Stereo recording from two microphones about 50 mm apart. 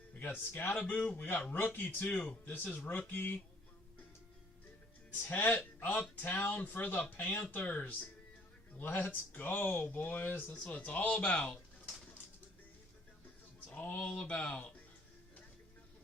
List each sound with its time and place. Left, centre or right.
0.1 s speech: left
5.3 s speech: left
10.8 s speech: left
13.7 s a sound: left
14.0 s speech: left